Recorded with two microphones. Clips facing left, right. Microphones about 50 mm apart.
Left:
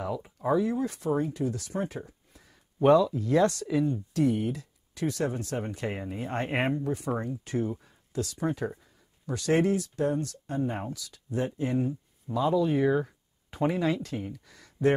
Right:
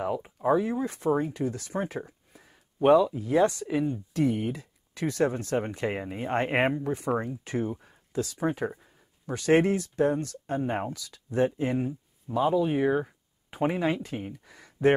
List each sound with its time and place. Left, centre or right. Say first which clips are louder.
0.0 s speech: right 3 dB; right
2.3 s speech: left 4 dB; centre
4.1 s speech: right 1 dB; right
7.1 s speech: right 5 dB; centre
7.4 s speech: even; right
7.8 s a sound: right 2 dB; right
8.5 s speech: right 2 dB; right
12.4 s speech: right 1 dB; right